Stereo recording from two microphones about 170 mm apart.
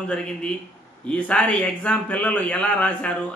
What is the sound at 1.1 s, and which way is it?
A man's voice, 10° left (ahead or behind).